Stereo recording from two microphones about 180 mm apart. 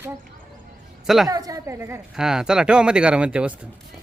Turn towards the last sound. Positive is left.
turn(degrees=-5)  # may be behind; listen again after turning